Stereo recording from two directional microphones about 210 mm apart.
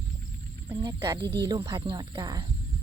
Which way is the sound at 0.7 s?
25° right (ahead or behind).